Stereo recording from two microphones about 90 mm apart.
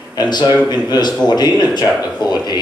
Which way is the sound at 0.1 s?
50° left (ahead or behind).